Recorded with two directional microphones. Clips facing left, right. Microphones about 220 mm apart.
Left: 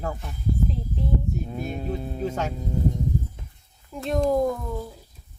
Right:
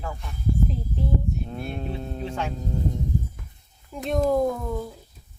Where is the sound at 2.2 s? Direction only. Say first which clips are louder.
Left 4 dB; 40° left (ahead or behind).